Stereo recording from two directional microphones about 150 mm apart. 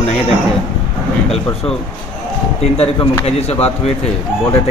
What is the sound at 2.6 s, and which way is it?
Speech, 45° left (ahead or behind).